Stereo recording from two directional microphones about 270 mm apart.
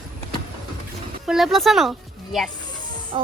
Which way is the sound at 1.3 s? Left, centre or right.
Centre.